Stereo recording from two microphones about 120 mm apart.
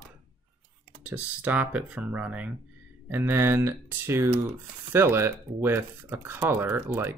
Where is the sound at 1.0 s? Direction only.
15° right (ahead or behind).